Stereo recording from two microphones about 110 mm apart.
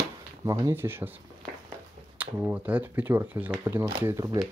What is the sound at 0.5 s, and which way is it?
Speech, 25° right (ahead or behind).